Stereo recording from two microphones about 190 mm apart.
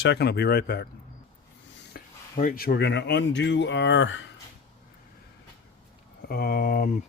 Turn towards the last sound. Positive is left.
turn(degrees=50)  # may be behind; listen again after turning